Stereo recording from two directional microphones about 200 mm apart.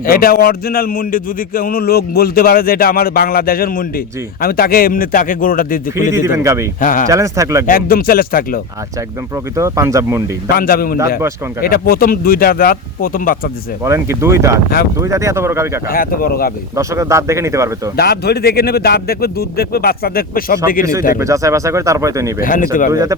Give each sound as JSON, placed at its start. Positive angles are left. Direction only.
{"t": 0.0, "sound": "a man's voice", "side_deg": 45}
{"t": 6.1, "sound": "speech", "side_deg": -15}
{"t": 6.7, "sound": "speech", "side_deg": 40}
{"t": 7.1, "sound": "speech", "side_deg": -15}
{"t": 7.7, "sound": "a man's voice", "side_deg": 45}
{"t": 9.6, "sound": "speech", "side_deg": -15}
{"t": 10.5, "sound": "a man's voice", "side_deg": 45}
{"t": 13.8, "sound": "speech", "side_deg": -15}
{"t": 15.9, "sound": "a man's voice", "side_deg": 45}
{"t": 16.7, "sound": "speech", "side_deg": -15}
{"t": 17.9, "sound": "a man's voice", "side_deg": 50}
{"t": 21.2, "sound": "speech", "side_deg": -15}
{"t": 22.4, "sound": "a man's voice", "side_deg": 45}
{"t": 22.9, "sound": "speech", "side_deg": -15}